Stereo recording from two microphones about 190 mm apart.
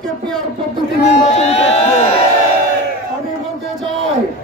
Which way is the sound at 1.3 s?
35° left (ahead or behind).